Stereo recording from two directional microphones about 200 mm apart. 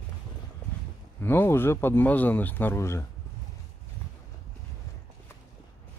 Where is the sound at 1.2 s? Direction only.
10° left (ahead or behind).